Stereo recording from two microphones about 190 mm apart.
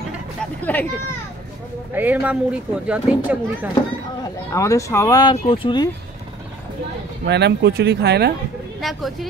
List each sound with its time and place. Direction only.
0.4 s a sound: 10° left (ahead or behind)
2.0 s speech: 10° right (ahead or behind)
4.5 s speech: 15° left (ahead or behind)
7.2 s speech: 60° right (ahead or behind)